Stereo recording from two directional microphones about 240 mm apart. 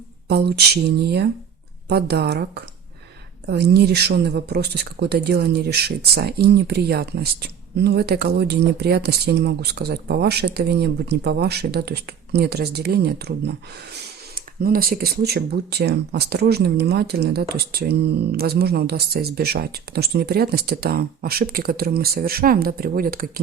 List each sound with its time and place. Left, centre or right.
0.3 s speech: right